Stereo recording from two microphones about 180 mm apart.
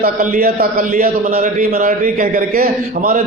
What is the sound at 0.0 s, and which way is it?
A man's voice, 50° right (ahead or behind).